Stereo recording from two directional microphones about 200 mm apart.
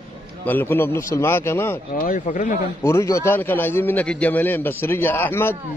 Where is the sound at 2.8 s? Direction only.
15° left (ahead or behind).